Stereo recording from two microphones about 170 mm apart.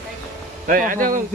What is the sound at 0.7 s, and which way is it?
Speech, 55° right (ahead or behind).